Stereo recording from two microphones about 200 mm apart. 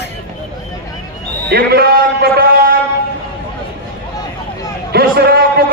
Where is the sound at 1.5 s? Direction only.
50° right (ahead or behind).